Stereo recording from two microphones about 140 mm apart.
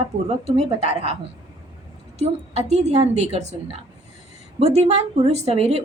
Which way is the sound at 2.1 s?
50° right (ahead or behind).